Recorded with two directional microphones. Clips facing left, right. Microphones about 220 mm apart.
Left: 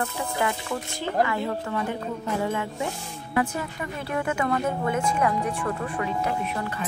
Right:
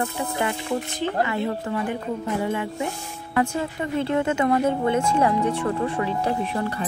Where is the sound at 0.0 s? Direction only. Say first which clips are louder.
Right 2 dB; 20° right (ahead or behind).